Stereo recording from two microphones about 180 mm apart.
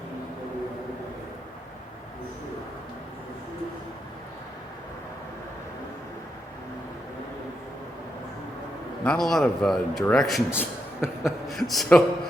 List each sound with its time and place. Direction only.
9.0 s speech: centre (ahead or behind)